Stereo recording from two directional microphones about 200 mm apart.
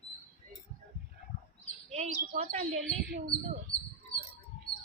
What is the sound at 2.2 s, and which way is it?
Speech, 40° right (ahead or behind).